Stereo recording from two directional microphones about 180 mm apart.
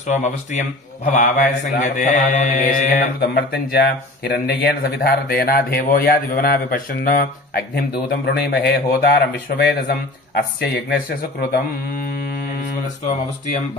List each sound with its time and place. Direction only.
0.0 s a man's voice: 40° left (ahead or behind); by 11.0 s 60° left (ahead or behind)
13.0 s a man's voice: 45° left (ahead or behind)